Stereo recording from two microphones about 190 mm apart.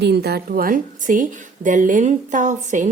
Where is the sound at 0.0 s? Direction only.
60° right (ahead or behind).